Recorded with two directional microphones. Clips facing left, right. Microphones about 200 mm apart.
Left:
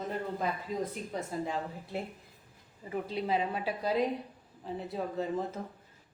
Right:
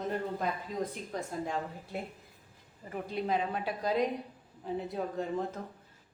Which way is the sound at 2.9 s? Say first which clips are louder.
Left 1 dB; 5° left (ahead or behind).